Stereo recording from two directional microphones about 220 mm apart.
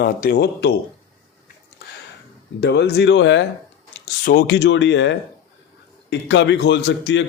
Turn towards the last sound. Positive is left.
turn(degrees=55)  # may be behind; listen again after turning